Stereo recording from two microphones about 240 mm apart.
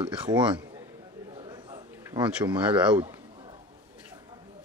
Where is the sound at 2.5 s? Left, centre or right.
Centre.